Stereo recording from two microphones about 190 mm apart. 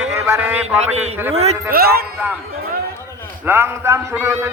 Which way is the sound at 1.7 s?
55° right (ahead or behind).